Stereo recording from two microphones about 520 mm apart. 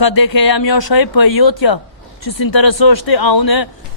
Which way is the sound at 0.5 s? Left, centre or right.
Left.